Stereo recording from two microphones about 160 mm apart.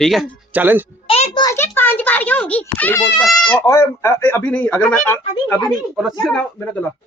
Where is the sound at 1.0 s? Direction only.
40° left (ahead or behind).